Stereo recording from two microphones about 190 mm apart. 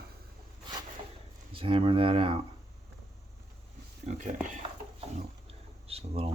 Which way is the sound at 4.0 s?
40° right (ahead or behind).